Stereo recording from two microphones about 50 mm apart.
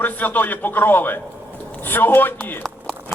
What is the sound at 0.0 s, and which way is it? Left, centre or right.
A man's voice, left.